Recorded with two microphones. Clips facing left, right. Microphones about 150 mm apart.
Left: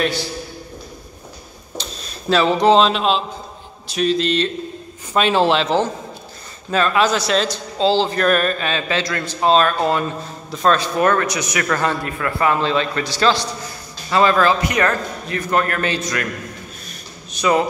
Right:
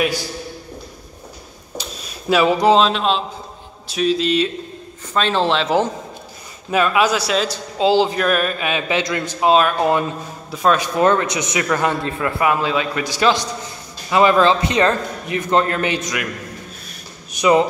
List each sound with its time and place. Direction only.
1.8 s speech: 10° right (ahead or behind)
5.1 s speech: 10° left (ahead or behind)
6.7 s a man's voice: 10° right (ahead or behind)
11.0 s a man's voice: 20° right (ahead or behind)
12.4 s a man's voice: 10° right (ahead or behind)
17.3 s speech: 20° right (ahead or behind)